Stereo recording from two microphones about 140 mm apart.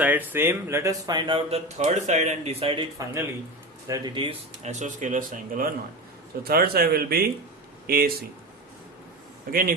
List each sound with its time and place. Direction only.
0.0 s speech: 10° right (ahead or behind); by 1.4 s 30° right (ahead or behind)
1.5 s speech: 50° right (ahead or behind)
3.8 s speech: 30° right (ahead or behind)
4.6 s speech: 55° right (ahead or behind); by 5.7 s 75° right (ahead or behind)
6.4 s a man's voice: 90° right
9.5 s a man's voice: 90° right